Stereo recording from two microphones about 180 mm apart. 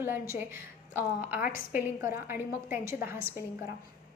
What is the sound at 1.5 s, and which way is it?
A woman's voice, 15° right (ahead or behind).